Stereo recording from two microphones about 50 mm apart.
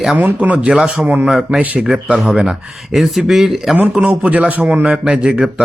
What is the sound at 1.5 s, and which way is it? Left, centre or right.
Speech, right.